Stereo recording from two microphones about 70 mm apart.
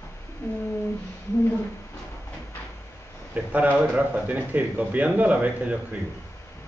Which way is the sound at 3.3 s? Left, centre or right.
Right.